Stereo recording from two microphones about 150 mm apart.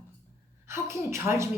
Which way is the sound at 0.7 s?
15° right (ahead or behind).